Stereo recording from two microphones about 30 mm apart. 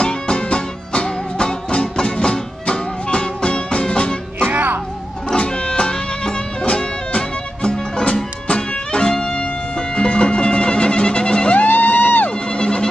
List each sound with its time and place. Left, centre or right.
0.0 s music: left
4.5 s music: right
5.3 s music: left
11.5 s music: left
12.3 s music: left